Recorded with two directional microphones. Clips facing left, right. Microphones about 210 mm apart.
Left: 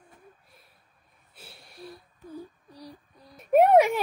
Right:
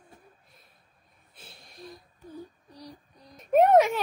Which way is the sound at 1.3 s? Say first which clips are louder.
Left 2 dB; 5° left (ahead or behind).